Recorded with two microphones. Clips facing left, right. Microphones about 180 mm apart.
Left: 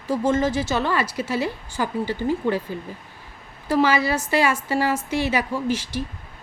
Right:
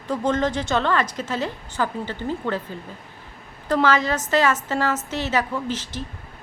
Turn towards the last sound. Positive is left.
turn(degrees=10)  # may be behind; listen again after turning